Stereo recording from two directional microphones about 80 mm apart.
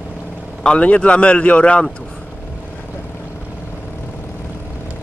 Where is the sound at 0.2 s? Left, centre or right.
Centre.